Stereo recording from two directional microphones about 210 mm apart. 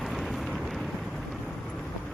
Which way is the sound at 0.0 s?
Centre (ahead or behind).